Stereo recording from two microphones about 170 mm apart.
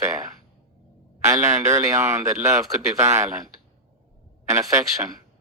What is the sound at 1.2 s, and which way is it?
A man's voice, 15° right (ahead or behind).